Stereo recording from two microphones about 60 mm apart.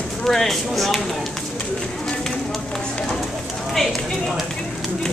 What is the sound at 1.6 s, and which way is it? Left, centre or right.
Bird, centre.